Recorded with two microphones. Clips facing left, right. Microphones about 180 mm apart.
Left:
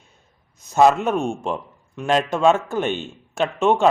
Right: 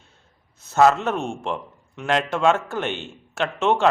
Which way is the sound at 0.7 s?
15° left (ahead or behind).